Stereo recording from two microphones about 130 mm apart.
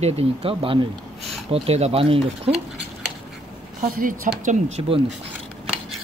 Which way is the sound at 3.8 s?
90° right.